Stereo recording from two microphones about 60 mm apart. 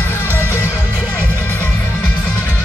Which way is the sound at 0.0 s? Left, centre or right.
Left.